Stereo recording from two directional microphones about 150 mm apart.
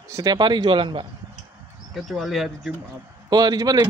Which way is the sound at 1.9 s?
Centre (ahead or behind).